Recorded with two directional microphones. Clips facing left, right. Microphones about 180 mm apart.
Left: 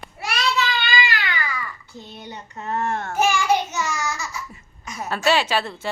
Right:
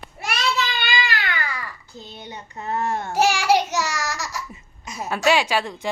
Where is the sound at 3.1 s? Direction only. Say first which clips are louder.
Right 2 dB; 75° right (ahead or behind).